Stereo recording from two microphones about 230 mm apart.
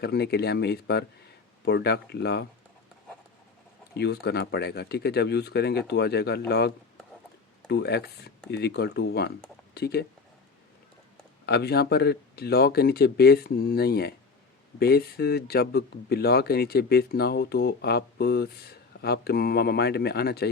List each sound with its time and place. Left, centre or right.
0.0 s speech: left
3.9 s speech: left
11.4 s speech: left